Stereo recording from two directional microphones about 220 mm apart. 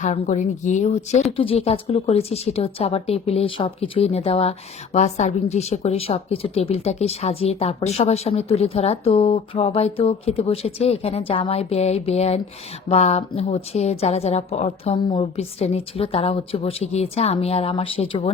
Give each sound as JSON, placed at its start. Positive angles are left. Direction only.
{"t": 0.0, "sound": "speech", "side_deg": 35}